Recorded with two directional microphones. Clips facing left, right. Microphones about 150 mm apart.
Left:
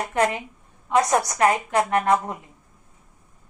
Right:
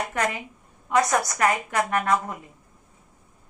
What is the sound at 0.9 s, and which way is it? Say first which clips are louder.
A woman's voice: left 2 dB; 25° left (ahead or behind).